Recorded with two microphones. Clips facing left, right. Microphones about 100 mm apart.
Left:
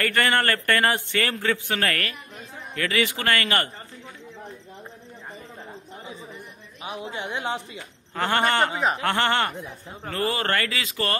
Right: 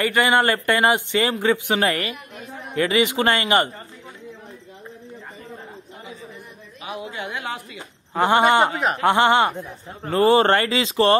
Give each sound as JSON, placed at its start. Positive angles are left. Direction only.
{"t": 0.0, "sound": "a man's voice", "side_deg": -15}
{"t": 6.8, "sound": "speech", "side_deg": 30}
{"t": 8.1, "sound": "a man's voice", "side_deg": -20}